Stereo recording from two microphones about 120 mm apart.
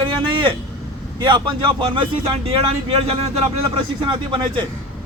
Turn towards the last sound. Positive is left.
turn(degrees=-45)  # may be behind; listen again after turning